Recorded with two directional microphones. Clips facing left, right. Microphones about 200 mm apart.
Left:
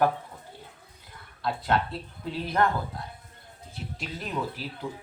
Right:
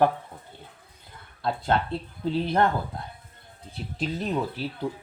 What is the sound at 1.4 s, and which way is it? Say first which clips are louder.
Speech: right 2 dB; 30° right (ahead or behind).